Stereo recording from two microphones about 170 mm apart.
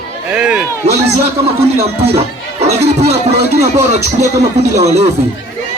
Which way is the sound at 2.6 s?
40° right (ahead or behind).